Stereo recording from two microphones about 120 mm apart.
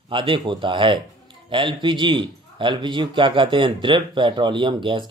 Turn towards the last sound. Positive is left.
turn(degrees=-40)  # may be behind; listen again after turning